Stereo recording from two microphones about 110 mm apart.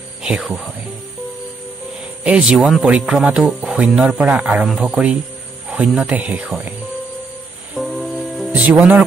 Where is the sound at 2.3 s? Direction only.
10° right (ahead or behind).